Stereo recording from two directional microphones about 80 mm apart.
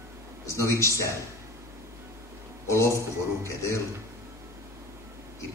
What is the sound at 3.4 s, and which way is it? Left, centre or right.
Speech, left.